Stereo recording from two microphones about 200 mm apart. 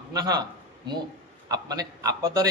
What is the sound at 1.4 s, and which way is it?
A man's voice, 20° right (ahead or behind).